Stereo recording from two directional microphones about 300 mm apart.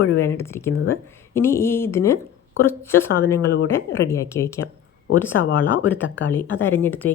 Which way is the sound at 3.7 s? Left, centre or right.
Centre.